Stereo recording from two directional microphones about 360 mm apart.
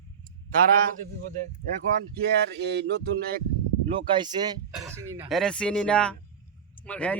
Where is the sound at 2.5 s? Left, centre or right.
Right.